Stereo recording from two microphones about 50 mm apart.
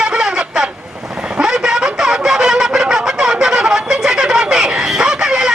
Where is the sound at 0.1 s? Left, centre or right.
Centre.